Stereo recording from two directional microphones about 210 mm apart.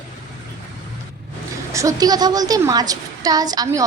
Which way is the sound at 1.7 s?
15° right (ahead or behind).